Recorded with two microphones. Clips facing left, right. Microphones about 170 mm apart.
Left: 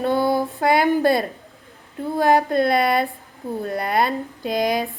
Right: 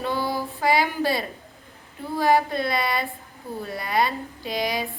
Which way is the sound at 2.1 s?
55° left (ahead or behind).